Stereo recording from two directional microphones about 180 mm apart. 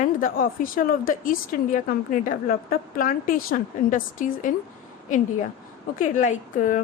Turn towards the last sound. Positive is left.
turn(degrees=45)  # may be behind; listen again after turning